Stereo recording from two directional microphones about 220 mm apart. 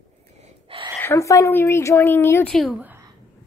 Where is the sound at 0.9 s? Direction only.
10° left (ahead or behind); by 3.0 s 5° right (ahead or behind).